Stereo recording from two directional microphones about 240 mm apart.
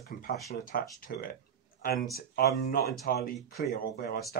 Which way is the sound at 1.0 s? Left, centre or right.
Left.